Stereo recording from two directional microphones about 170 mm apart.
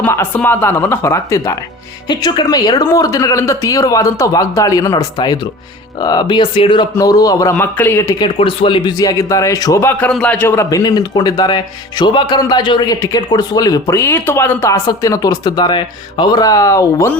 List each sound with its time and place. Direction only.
0.0 s a man's voice: 10° left (ahead or behind)
8.4 s a man's voice: 30° left (ahead or behind)